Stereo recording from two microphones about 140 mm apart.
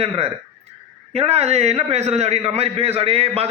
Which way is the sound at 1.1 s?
45° right (ahead or behind).